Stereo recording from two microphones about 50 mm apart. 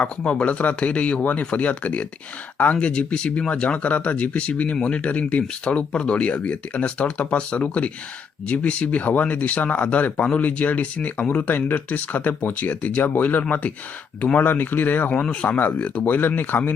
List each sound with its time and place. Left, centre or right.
0.3 s speech: left
14.3 s speech: left
15.1 s speech: left
16.0 s speech: left